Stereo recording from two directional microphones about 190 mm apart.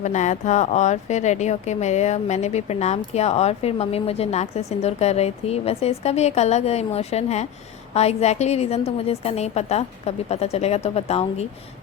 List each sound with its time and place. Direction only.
0.0 s a woman's voice: 40° left (ahead or behind)